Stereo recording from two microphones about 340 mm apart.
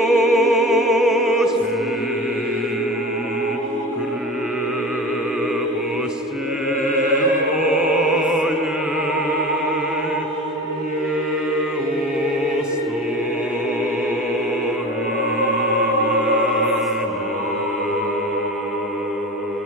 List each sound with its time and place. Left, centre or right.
0.0 s music: centre
7.7 s music: centre